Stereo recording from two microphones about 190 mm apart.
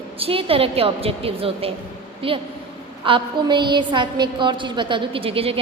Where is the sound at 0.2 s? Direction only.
30° right (ahead or behind).